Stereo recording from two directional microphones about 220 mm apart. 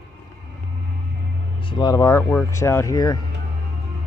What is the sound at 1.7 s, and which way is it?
Speech, 20° left (ahead or behind).